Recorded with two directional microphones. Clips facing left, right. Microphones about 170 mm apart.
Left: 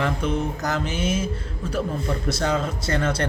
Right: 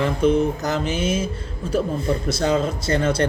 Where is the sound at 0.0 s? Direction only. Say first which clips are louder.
Right 6 dB; 25° right (ahead or behind).